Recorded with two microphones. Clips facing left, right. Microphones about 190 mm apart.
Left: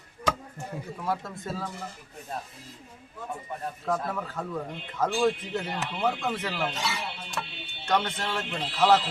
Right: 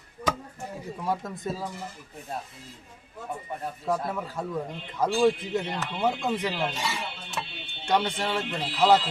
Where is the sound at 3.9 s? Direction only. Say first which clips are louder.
Right 1 dB; 10° right (ahead or behind).